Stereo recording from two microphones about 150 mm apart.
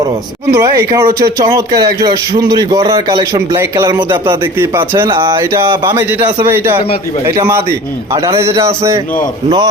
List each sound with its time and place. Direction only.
0.5 s a man's voice: 25° right (ahead or behind)